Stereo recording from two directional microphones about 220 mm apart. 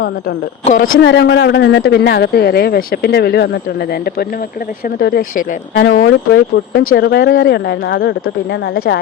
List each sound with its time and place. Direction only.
0.6 s a woman's voice: 35° left (ahead or behind)
0.9 s speech: 50° left (ahead or behind)